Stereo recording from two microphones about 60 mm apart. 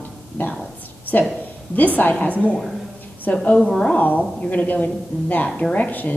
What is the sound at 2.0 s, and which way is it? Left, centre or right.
Speech, left.